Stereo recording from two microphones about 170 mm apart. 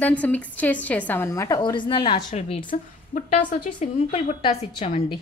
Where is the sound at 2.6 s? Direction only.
50° left (ahead or behind).